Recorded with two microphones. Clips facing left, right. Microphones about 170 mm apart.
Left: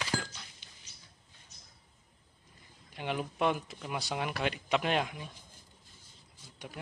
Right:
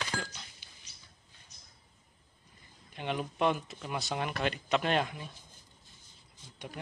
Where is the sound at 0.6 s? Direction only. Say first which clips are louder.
Left 1 dB; 5° right (ahead or behind).